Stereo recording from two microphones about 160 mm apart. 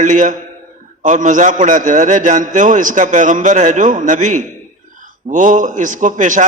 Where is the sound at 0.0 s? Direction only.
50° right (ahead or behind).